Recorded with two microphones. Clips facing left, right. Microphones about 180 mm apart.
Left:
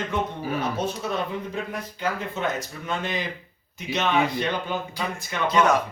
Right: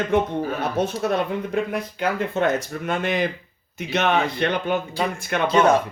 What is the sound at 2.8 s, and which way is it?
Speech, 65° right (ahead or behind).